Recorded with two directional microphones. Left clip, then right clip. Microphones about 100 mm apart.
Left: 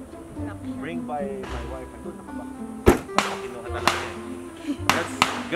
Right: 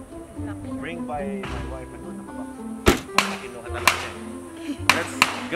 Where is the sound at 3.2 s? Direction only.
20° right (ahead or behind).